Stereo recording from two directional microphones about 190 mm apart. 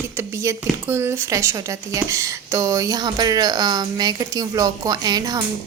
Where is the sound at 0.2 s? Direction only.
15° right (ahead or behind).